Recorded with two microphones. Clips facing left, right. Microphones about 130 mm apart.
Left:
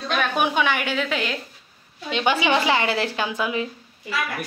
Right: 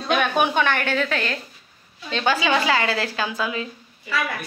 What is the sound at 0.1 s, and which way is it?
A woman's voice, centre (ahead or behind).